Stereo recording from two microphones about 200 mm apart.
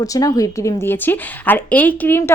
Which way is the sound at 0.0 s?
15° left (ahead or behind).